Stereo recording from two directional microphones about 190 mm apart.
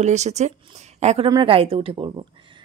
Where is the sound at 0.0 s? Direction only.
35° right (ahead or behind).